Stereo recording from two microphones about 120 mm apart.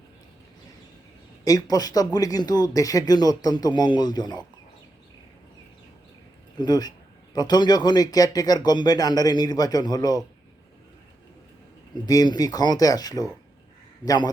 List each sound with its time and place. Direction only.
1.5 s speech: 30° left (ahead or behind)
6.6 s speech: 35° left (ahead or behind)
12.0 s speech: 35° left (ahead or behind)